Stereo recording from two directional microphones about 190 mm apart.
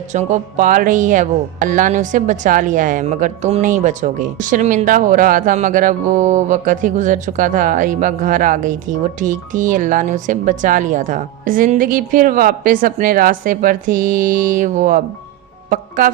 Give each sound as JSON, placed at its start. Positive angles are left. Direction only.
{"t": 0.1, "sound": "speech", "side_deg": -40}